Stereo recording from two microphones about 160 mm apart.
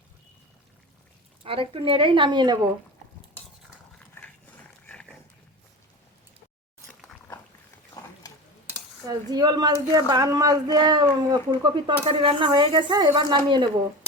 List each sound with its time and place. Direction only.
1.5 s a woman's voice: 35° right (ahead or behind)
4.2 s dog: 15° left (ahead or behind)
6.8 s dog: centre (ahead or behind)
9.0 s speech: 25° right (ahead or behind)